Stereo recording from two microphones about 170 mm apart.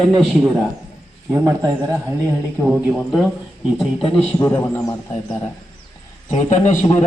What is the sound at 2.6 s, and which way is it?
Speech, 5° right (ahead or behind).